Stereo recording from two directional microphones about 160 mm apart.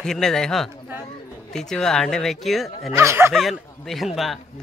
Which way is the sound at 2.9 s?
15° right (ahead or behind).